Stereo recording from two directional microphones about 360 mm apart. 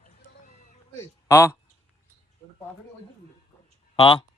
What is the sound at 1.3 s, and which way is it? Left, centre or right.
Speech, centre.